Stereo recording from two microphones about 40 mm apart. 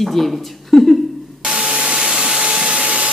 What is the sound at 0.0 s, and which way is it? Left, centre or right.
Speech, centre.